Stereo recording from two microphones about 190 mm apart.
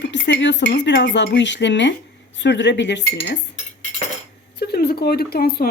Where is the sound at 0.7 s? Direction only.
65° left (ahead or behind).